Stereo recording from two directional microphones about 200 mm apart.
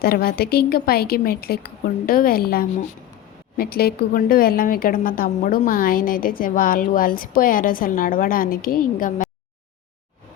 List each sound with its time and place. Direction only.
0.0 s a woman's voice: 50° left (ahead or behind)